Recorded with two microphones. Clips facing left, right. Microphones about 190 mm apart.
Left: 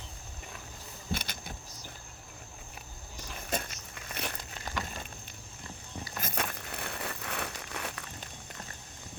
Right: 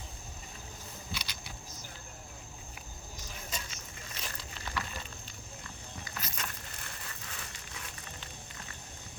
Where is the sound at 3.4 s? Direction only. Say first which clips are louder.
Left 10 dB; 55° left (ahead or behind).